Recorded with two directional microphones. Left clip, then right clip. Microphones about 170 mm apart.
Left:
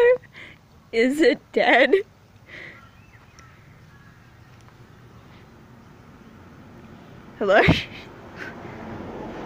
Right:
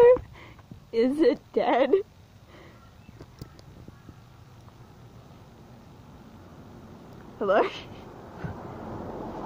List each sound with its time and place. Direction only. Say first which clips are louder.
0.0 s a sound: even; 10° right (ahead or behind)
0.9 s speech: left 4 dB; centre (ahead or behind)
7.4 s speech: left 6 dB; 10° left (ahead or behind)